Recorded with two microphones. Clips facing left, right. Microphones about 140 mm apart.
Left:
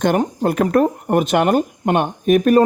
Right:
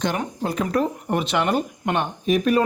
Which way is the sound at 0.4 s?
55° left (ahead or behind).